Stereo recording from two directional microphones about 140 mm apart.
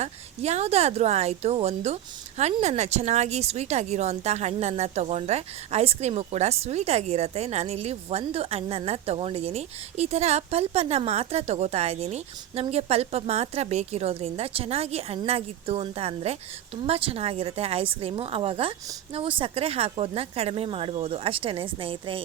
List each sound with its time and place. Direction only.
0.0 s a woman's voice: 50° right (ahead or behind)